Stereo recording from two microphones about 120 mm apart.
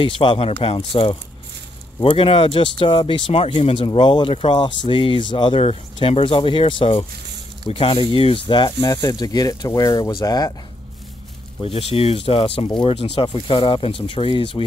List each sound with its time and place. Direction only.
0.0 s speech: 50° left (ahead or behind)
11.6 s speech: 55° left (ahead or behind)
13.3 s speech: 45° left (ahead or behind)